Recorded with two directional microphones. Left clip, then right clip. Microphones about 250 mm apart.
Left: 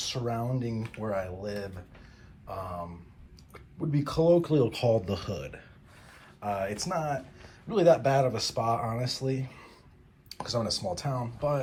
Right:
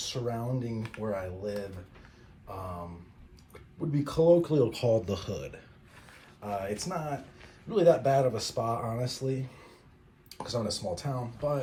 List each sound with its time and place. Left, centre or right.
0.0 s speech: centre
0.8 s speech: centre
1.0 s speech: centre